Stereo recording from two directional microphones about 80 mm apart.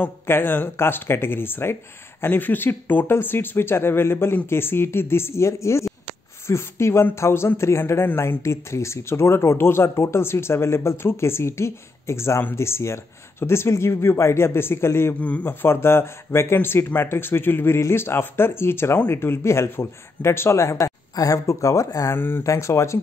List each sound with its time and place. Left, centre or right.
0.3 s speech: left
15.1 s a man's voice: centre
15.6 s speech: left
22.1 s speech: left
22.4 s speech: left